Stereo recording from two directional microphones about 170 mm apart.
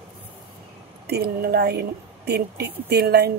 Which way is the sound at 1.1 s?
70° right (ahead or behind).